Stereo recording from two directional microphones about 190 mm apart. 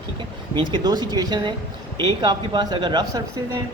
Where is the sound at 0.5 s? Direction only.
20° right (ahead or behind).